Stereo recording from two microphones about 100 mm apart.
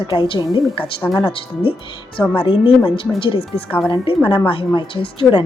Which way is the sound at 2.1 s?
15° left (ahead or behind).